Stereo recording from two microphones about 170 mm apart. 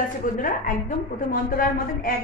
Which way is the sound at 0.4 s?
50° left (ahead or behind).